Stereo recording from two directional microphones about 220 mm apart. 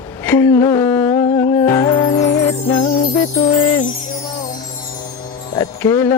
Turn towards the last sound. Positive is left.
turn(degrees=10)  # may be behind; listen again after turning